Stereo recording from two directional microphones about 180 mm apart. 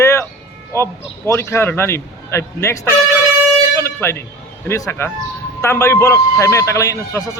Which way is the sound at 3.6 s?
15° left (ahead or behind).